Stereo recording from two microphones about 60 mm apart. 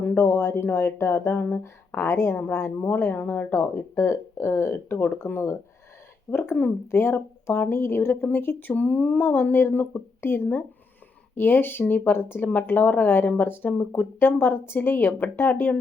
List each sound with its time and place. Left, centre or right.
0.0 s speech: left
3.5 s speech: left